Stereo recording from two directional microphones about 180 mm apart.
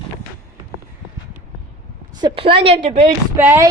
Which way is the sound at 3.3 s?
10° right (ahead or behind).